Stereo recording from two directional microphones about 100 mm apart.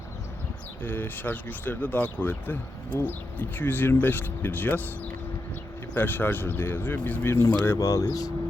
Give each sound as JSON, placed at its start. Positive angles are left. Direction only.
{"t": 0.8, "sound": "speech", "side_deg": 20}
{"t": 5.9, "sound": "speech", "side_deg": 20}